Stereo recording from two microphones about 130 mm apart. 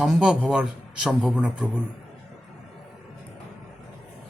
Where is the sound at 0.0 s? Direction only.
5° right (ahead or behind).